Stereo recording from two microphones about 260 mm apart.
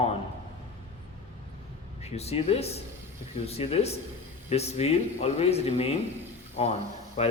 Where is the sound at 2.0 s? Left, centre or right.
Left.